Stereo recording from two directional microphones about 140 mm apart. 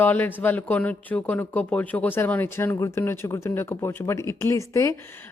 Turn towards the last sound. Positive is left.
turn(degrees=15)  # may be behind; listen again after turning